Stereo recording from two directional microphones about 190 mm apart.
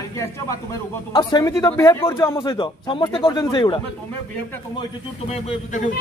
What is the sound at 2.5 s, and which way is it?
A man's voice, 25° left (ahead or behind).